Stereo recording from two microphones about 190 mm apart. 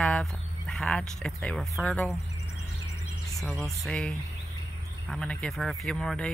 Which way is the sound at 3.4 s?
Centre (ahead or behind).